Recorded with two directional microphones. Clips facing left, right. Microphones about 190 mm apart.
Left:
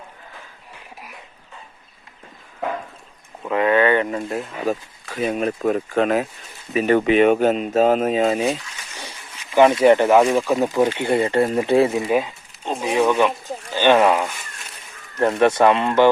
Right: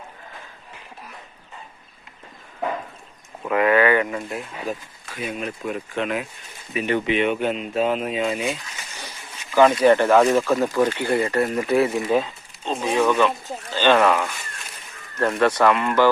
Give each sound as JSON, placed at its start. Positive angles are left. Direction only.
{"t": 3.5, "sound": "speech", "side_deg": 25}
{"t": 9.0, "sound": "a sound", "side_deg": 30}
{"t": 10.3, "sound": "speech", "side_deg": 15}
{"t": 12.0, "sound": "speech", "side_deg": 10}